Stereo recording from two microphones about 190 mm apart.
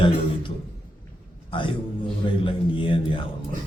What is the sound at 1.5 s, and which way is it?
A man's voice, 25° left (ahead or behind).